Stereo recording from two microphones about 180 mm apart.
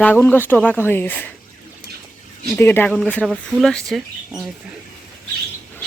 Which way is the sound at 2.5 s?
10° left (ahead or behind).